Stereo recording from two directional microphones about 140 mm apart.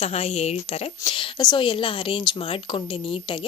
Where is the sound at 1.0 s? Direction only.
35° left (ahead or behind).